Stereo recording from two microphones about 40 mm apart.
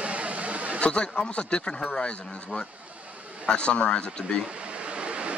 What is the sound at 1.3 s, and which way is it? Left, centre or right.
Speech, left.